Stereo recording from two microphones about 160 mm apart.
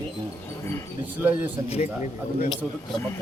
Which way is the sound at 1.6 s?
40° left (ahead or behind).